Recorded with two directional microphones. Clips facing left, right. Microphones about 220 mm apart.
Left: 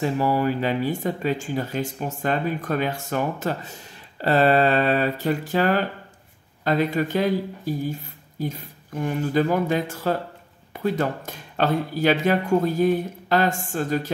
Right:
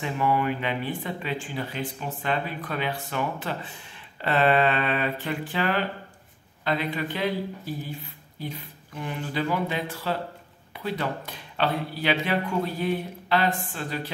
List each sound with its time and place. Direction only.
0.0 s speech: 35° left (ahead or behind)